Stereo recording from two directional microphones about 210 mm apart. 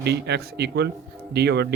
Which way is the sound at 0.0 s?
55° right (ahead or behind).